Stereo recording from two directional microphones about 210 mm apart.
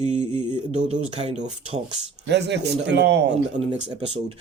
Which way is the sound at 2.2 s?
55° right (ahead or behind).